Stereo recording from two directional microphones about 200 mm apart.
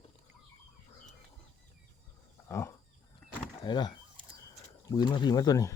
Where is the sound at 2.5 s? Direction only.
15° left (ahead or behind).